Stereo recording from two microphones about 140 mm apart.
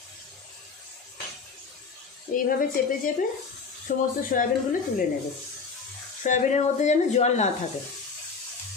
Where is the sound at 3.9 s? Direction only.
65° left (ahead or behind).